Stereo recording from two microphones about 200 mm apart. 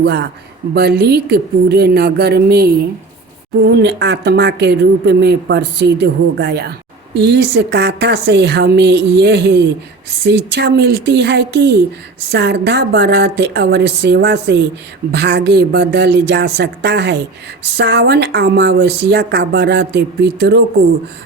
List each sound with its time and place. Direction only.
0.0 s a woman's voice: 55° right (ahead or behind)